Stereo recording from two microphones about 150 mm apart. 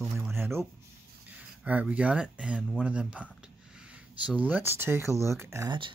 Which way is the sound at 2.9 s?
10° right (ahead or behind).